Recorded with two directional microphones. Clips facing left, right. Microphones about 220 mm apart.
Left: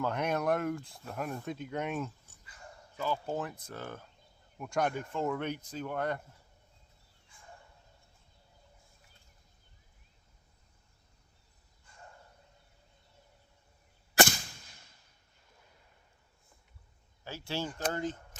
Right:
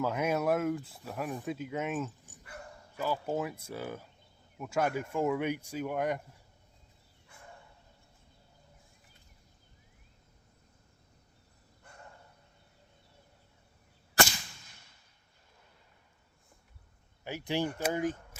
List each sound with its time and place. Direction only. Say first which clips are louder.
0.0 s speech: right 2 dB; 5° right (ahead or behind)
2.4 s bow-wow: right 5 dB; 65° right (ahead or behind)
3.0 s speech: right 2 dB; 5° right (ahead or behind)
7.3 s a sound: right 6 dB; 65° right (ahead or behind)
11.9 s a sound: right 6 dB; 65° right (ahead or behind)
17.2 s speech: right 5 dB; 15° right (ahead or behind)